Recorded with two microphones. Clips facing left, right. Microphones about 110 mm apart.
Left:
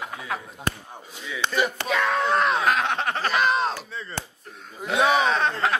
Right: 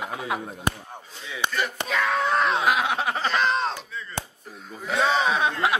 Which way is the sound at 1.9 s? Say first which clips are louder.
Even; centre (ahead or behind).